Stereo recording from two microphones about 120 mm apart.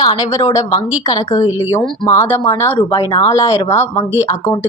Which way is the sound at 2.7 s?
40° left (ahead or behind).